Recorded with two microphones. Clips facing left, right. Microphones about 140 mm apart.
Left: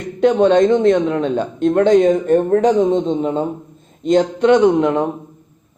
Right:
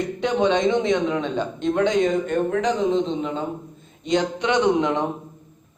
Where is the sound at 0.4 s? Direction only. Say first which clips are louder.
Left 6 dB; 50° left (ahead or behind).